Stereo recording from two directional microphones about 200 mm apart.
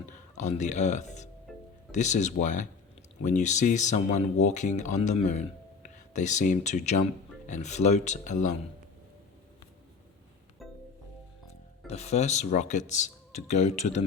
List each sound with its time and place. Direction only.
0.3 s speech: 35° left (ahead or behind)
10.6 s music: centre (ahead or behind)
11.9 s speech: 35° left (ahead or behind)